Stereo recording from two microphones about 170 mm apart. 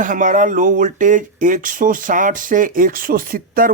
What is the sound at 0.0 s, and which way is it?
Speech, 50° right (ahead or behind).